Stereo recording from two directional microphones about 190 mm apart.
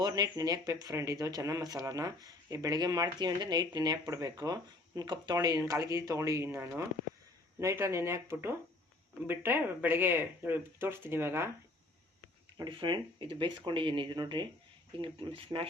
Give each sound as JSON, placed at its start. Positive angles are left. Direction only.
{"t": 0.0, "sound": "speech", "side_deg": -20}
{"t": 12.5, "sound": "speech", "side_deg": -25}